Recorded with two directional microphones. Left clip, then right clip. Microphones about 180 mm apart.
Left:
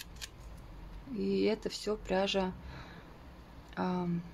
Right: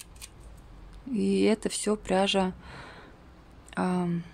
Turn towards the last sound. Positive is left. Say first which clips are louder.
# right 6 dB
turn(degrees=-45)  # may be behind; listen again after turning